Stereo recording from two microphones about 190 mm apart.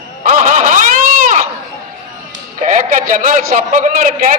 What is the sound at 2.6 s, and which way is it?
A man's voice, 40° right (ahead or behind).